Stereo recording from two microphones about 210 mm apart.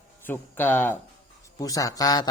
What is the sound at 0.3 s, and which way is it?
A man's voice, 10° left (ahead or behind).